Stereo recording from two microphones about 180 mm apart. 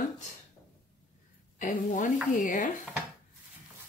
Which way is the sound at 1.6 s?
50° left (ahead or behind).